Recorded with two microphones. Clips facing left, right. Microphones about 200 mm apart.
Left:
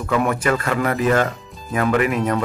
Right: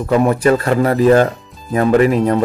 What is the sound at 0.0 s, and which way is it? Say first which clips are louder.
A man's voice: right 7 dB; 30° right (ahead or behind).